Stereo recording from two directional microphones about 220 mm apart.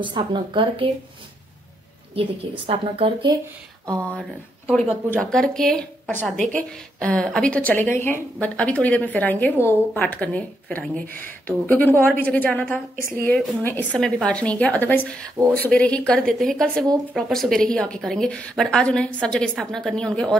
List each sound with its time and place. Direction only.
0.0 s a woman's voice: 20° right (ahead or behind)
2.1 s a woman's voice: 25° right (ahead or behind)
4.1 s a woman's voice: 5° left (ahead or behind)